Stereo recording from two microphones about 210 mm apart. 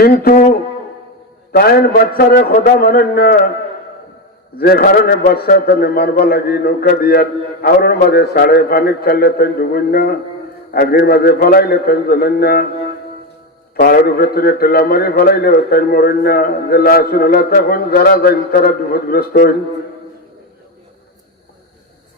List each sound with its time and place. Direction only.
0.0 s a man's voice: 45° left (ahead or behind)
1.5 s a man's voice: 45° left (ahead or behind)
4.5 s a man's voice: 45° left (ahead or behind)
13.7 s a man's voice: 45° left (ahead or behind)